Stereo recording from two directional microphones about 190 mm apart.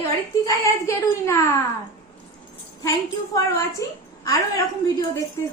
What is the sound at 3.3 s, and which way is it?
A woman's voice, 15° left (ahead or behind).